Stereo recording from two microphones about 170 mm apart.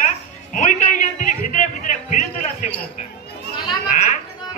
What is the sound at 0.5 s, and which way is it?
Music, 50° left (ahead or behind).